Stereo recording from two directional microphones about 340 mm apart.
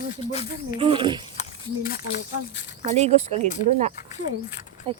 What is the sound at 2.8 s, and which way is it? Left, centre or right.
Speech, centre.